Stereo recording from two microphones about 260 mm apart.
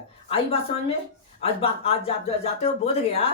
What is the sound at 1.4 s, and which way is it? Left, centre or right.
Speech, left.